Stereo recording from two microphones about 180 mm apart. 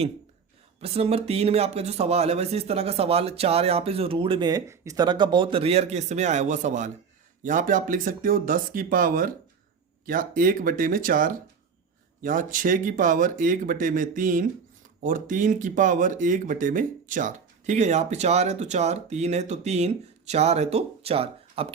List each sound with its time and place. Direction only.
0.8 s speech: 35° right (ahead or behind)